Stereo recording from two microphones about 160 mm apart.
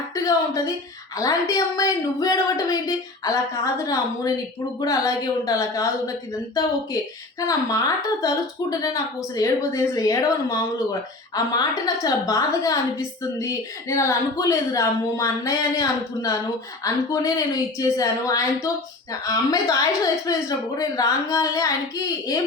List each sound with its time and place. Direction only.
0.1 s a sound: 20° left (ahead or behind)
1.1 s speech: 20° left (ahead or behind)
7.3 s speech: 20° left (ahead or behind)
11.3 s speech: 25° left (ahead or behind)